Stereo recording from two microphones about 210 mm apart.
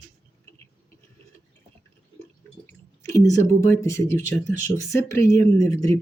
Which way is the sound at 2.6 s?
15° left (ahead or behind).